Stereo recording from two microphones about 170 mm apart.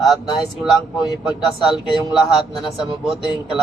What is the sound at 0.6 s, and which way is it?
Speech, centre (ahead or behind).